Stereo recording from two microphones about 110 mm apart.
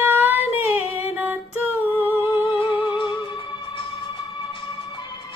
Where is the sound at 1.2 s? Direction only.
15° right (ahead or behind).